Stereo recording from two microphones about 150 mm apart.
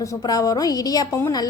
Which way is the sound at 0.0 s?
25° left (ahead or behind).